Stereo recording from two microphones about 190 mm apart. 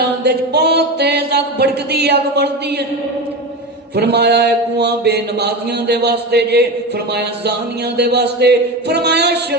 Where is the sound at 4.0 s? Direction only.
60° right (ahead or behind).